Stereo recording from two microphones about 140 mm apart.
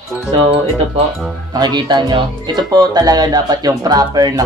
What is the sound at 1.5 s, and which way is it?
Speech, 30° right (ahead or behind).